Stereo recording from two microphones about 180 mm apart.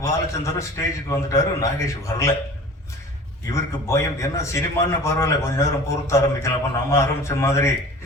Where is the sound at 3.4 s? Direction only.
15° left (ahead or behind).